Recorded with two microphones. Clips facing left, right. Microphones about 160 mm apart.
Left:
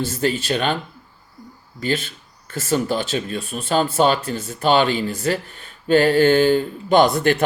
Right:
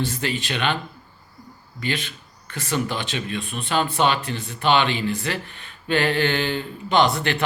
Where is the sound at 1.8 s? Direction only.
40° left (ahead or behind).